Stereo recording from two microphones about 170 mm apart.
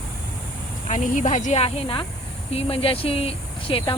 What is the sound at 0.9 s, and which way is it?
Speech, 45° left (ahead or behind).